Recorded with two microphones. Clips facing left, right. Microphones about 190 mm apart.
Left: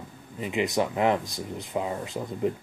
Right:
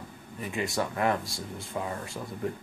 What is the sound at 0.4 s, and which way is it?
Speech, 20° left (ahead or behind).